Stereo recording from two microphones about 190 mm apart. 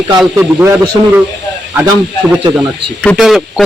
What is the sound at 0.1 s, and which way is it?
Speech, 15° right (ahead or behind).